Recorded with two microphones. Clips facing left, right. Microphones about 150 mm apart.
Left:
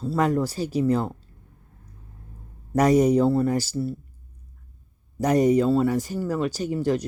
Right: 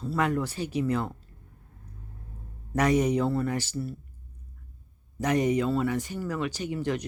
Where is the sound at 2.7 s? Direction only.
40° left (ahead or behind).